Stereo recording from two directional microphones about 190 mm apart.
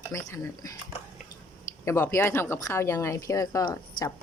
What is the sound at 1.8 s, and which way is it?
Speech, 15° left (ahead or behind).